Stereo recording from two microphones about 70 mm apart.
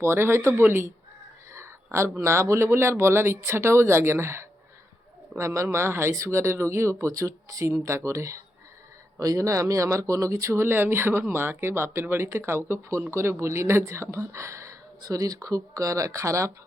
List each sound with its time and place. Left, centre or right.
0.0 s speech: right
1.5 s a sound: right
2.0 s speech: right
7.1 s speech: right
15.0 s speech: right